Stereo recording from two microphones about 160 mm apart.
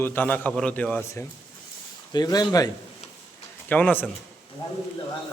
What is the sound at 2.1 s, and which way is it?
Speech, 25° left (ahead or behind).